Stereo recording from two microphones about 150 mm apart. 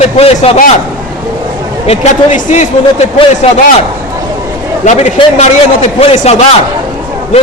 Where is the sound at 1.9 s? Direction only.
55° left (ahead or behind).